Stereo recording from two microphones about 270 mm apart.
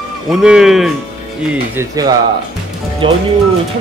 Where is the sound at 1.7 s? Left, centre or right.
Centre.